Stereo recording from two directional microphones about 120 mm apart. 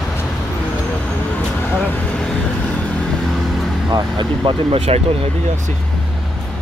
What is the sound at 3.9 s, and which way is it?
Speech, 40° right (ahead or behind).